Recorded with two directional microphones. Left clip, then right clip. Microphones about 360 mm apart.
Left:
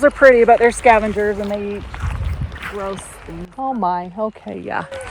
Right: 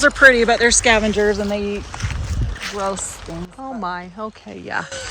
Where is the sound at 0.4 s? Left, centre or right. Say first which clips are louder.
Left 3 dB; centre.